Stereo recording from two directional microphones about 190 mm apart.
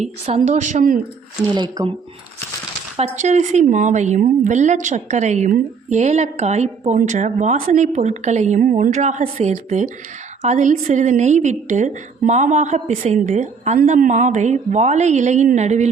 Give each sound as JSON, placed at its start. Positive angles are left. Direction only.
{"t": 0.0, "sound": "speech", "side_deg": -35}
{"t": 1.5, "sound": "speech", "side_deg": -20}
{"t": 3.0, "sound": "speech", "side_deg": -40}